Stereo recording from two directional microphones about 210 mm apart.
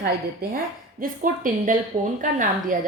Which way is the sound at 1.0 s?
40° right (ahead or behind).